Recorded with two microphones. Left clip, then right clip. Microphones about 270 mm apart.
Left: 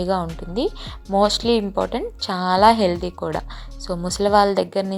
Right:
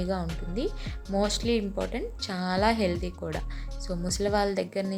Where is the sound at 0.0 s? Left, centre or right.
Centre.